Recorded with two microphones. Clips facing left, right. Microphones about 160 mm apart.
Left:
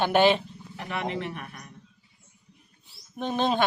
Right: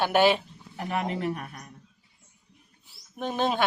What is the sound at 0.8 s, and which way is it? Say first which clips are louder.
Speech: right 2 dB; 40° right (ahead or behind).